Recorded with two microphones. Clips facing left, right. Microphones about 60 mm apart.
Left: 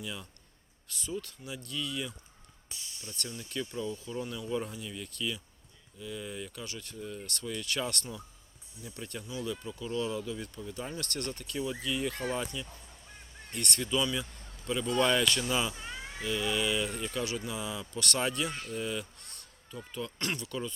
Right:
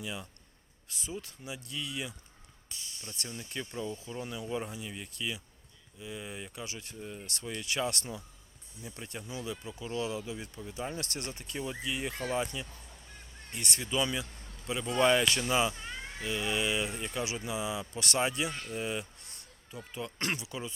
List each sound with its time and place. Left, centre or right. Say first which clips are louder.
0.0 s speech: right 1 dB; centre
3.2 s speech: left 3 dB; centre
13.8 s speech: even; centre
15.7 s cat: even; centre
16.2 s speech: left 1 dB; centre
20.3 s speech: left 2 dB; centre